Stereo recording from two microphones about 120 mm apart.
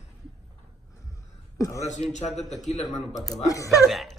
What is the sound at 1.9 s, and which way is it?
A man's voice, 75° left (ahead or behind).